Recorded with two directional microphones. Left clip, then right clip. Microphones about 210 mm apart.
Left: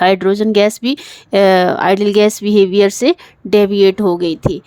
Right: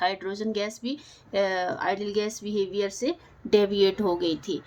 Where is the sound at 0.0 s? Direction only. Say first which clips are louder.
Left 16 dB; 55° left (ahead or behind).